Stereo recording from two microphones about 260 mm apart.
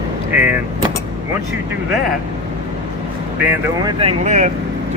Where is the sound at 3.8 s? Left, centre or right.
Right.